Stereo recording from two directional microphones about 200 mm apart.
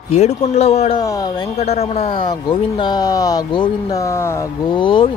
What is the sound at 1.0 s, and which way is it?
Speech, 20° left (ahead or behind).